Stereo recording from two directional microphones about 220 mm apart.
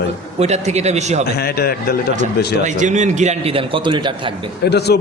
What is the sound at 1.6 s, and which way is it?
Speech, 45° left (ahead or behind).